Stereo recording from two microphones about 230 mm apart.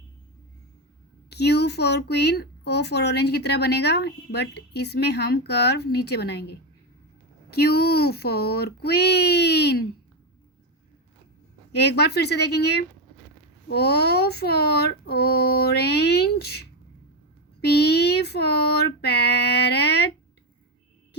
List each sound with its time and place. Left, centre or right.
1.3 s speech: left
11.7 s speech: left